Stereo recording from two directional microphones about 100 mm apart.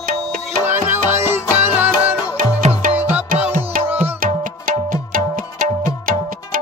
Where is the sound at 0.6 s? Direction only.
20° right (ahead or behind).